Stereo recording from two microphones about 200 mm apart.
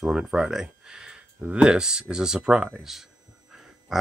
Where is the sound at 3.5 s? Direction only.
Centre (ahead or behind).